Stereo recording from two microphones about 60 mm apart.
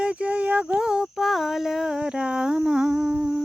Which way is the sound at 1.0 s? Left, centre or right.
Centre.